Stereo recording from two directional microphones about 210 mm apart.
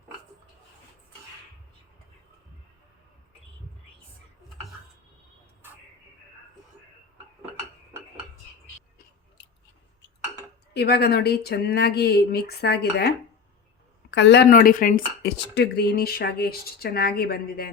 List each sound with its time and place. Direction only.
10.8 s speech: 50° left (ahead or behind)